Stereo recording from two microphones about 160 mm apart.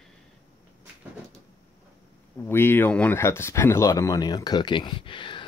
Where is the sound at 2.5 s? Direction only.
15° left (ahead or behind).